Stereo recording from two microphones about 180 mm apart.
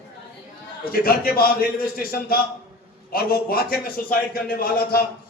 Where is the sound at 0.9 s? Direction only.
55° left (ahead or behind).